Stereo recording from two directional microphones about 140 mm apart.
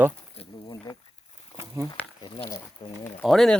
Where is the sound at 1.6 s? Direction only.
20° right (ahead or behind).